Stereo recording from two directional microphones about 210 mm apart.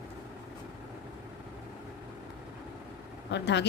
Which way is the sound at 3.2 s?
55° left (ahead or behind).